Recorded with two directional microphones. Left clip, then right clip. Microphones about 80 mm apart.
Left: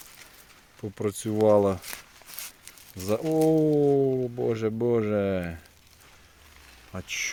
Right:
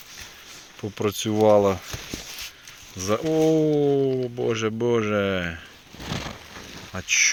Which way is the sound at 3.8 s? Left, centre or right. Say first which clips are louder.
Right 1 dB; centre.